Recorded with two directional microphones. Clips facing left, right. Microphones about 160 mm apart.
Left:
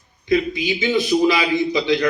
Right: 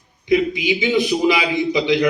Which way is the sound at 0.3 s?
15° right (ahead or behind).